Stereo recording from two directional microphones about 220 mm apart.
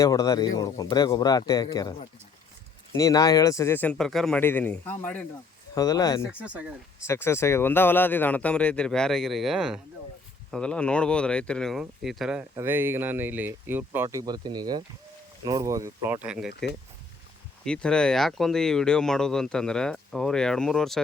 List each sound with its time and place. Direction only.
0.0 s speech: 15° left (ahead or behind)
6.3 s speech: 5° right (ahead or behind)
7.1 s speech: 10° left (ahead or behind); by 16.5 s 5° right (ahead or behind)
17.7 s speech: 5° left (ahead or behind)